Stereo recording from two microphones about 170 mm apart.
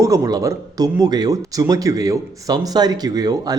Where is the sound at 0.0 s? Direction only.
20° right (ahead or behind).